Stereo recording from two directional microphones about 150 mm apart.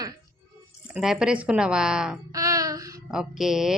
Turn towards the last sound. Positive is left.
turn(degrees=-5)  # may be behind; listen again after turning